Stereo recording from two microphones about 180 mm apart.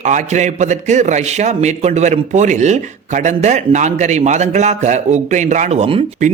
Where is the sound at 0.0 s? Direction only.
40° right (ahead or behind).